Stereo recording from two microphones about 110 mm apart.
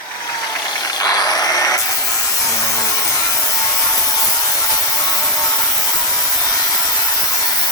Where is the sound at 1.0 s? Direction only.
35° left (ahead or behind).